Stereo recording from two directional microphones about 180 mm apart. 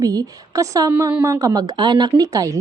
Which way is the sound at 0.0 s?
20° right (ahead or behind).